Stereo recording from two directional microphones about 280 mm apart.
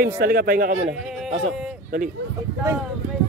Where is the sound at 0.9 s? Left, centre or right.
Centre.